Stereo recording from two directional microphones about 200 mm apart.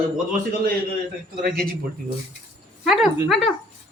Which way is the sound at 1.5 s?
45° right (ahead or behind).